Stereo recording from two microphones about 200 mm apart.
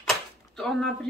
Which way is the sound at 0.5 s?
Centre (ahead or behind).